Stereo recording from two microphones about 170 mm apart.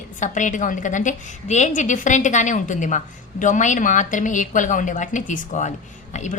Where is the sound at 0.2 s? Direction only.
50° left (ahead or behind).